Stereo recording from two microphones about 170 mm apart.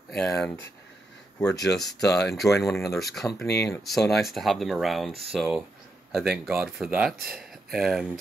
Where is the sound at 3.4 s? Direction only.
80° left.